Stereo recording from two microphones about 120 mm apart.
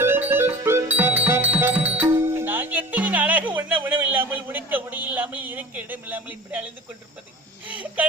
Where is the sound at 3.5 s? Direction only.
15° right (ahead or behind).